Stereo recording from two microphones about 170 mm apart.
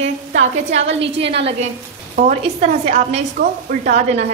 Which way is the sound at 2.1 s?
45° right (ahead or behind).